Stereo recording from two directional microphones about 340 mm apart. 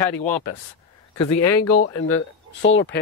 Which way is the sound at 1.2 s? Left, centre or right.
Left.